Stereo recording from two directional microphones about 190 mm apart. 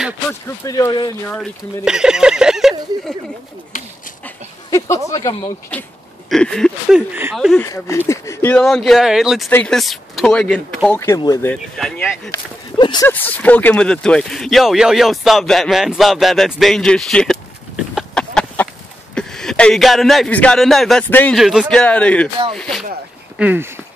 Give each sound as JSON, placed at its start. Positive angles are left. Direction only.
{"t": 0.3, "sound": "speech", "side_deg": 20}
{"t": 1.3, "sound": "speech", "side_deg": 0}
{"t": 4.6, "sound": "speech", "side_deg": 15}
{"t": 6.3, "sound": "speech", "side_deg": 5}
{"t": 7.6, "sound": "speech", "side_deg": 15}
{"t": 11.0, "sound": "speech", "side_deg": 20}
{"t": 11.5, "sound": "speech", "side_deg": 5}
{"t": 12.7, "sound": "a sound", "side_deg": 25}
{"t": 13.1, "sound": "speech", "side_deg": 10}
{"t": 17.9, "sound": "a sound", "side_deg": 5}
{"t": 19.1, "sound": "speech", "side_deg": 5}